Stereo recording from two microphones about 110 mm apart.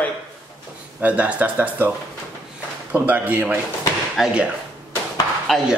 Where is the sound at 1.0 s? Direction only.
15° right (ahead or behind).